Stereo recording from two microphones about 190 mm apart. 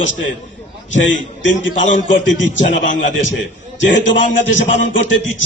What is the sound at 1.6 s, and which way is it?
A man's voice, 75° left (ahead or behind).